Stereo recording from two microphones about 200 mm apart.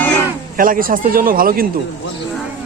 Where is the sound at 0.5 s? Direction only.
45° right (ahead or behind).